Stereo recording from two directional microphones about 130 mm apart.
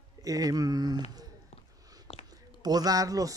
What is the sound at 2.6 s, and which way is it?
Speech, 30° right (ahead or behind).